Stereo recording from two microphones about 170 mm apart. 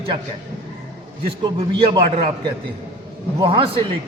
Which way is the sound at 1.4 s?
30° right (ahead or behind).